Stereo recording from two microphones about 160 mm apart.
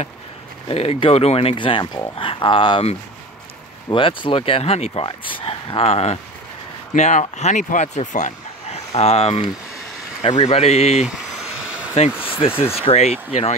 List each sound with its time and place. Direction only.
0.7 s speech: 35° left (ahead or behind)
11.1 s a sound: 5° right (ahead or behind)
12.1 s speech: 10° right (ahead or behind)
12.4 s speech: 35° left (ahead or behind)